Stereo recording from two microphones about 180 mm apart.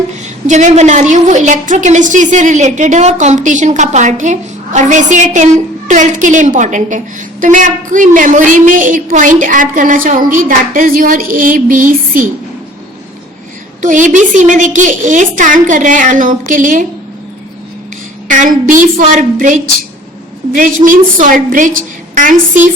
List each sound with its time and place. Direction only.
0.4 s a woman's voice: 40° right (ahead or behind)
13.8 s a woman's voice: 45° right (ahead or behind)
18.3 s a woman's voice: 45° right (ahead or behind)